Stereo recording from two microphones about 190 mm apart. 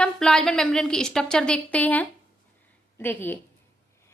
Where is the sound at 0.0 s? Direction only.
5° left (ahead or behind).